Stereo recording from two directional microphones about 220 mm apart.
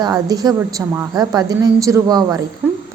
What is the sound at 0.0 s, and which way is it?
A woman's voice, 15° right (ahead or behind).